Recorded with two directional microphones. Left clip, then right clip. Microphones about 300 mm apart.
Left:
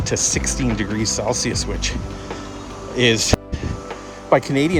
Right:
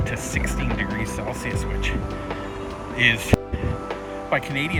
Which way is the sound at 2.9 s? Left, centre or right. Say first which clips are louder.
Left 3 dB; centre.